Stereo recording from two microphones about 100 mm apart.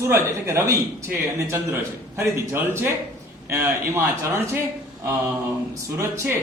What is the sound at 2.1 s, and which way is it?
A man's voice, 25° right (ahead or behind).